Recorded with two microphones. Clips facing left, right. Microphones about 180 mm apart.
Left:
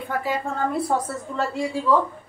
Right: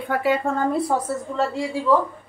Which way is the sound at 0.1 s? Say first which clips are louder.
Right 5 dB; 65° right (ahead or behind).